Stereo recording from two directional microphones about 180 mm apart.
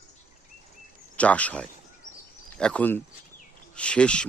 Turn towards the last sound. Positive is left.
turn(degrees=5)  # may be behind; listen again after turning